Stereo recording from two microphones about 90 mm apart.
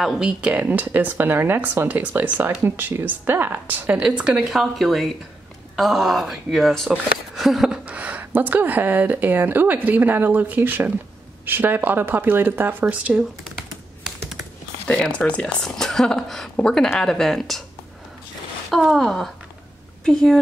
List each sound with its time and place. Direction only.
0.0 s a woman's voice: 10° right (ahead or behind)
14.9 s speech: 10° left (ahead or behind)
18.7 s speech: centre (ahead or behind)